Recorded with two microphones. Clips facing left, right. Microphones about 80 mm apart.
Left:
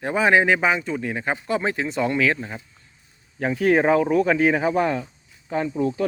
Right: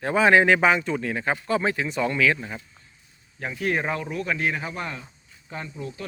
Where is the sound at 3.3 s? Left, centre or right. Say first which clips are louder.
Left 8 dB; left.